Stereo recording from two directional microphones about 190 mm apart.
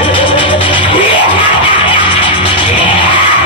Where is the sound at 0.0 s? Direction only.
25° left (ahead or behind).